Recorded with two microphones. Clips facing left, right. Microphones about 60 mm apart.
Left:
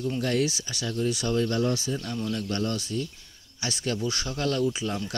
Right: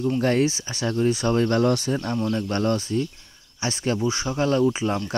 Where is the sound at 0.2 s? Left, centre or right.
Right.